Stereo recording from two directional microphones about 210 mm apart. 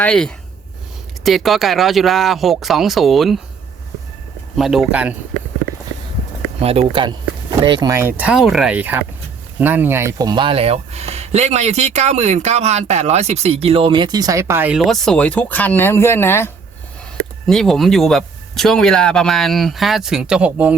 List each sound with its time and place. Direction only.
0.0 s speech: 5° left (ahead or behind)
4.5 s speech: centre (ahead or behind)
6.6 s speech: 30° right (ahead or behind); by 20.7 s 5° right (ahead or behind)